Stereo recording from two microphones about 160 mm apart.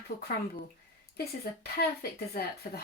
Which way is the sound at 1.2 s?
80° left.